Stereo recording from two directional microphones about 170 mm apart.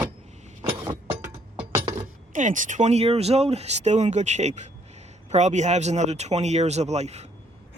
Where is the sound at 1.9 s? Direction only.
45° right (ahead or behind).